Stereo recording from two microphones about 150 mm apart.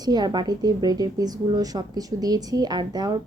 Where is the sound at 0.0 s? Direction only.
25° right (ahead or behind).